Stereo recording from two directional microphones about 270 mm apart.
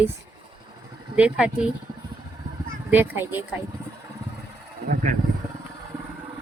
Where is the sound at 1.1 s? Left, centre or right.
Centre.